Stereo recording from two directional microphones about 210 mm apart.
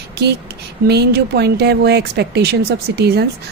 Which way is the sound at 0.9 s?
50° right (ahead or behind).